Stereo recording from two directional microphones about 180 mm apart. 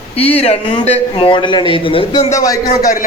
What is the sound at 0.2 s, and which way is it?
A man's voice, 35° left (ahead or behind).